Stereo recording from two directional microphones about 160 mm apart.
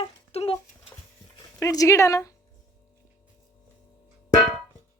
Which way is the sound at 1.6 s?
20° left (ahead or behind).